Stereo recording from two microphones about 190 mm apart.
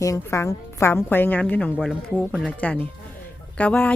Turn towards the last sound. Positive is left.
turn(degrees=10)  # may be behind; listen again after turning